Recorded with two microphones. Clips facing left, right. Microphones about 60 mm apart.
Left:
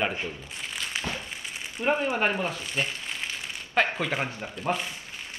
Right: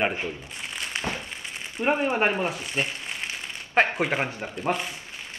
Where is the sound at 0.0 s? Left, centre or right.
Right.